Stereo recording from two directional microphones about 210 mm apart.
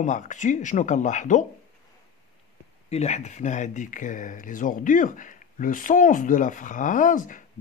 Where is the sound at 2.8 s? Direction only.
30° left (ahead or behind).